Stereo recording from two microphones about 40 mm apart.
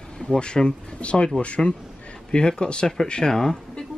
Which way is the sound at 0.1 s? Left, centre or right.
Centre.